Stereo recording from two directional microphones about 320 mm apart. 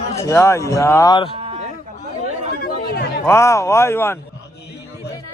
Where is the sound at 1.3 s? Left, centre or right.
Centre.